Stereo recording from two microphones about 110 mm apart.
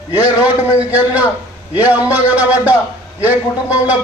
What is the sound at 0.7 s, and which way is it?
Music, 10° right (ahead or behind).